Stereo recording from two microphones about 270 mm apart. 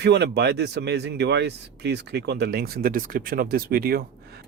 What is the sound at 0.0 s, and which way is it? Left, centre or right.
Speech, right.